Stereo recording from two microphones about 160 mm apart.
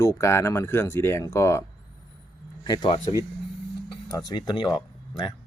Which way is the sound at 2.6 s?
25° left (ahead or behind).